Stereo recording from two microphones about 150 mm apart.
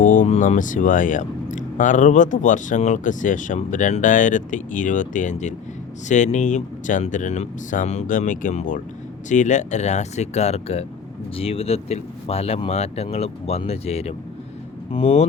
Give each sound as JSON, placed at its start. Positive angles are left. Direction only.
{"t": 0.0, "sound": "speech", "side_deg": 60}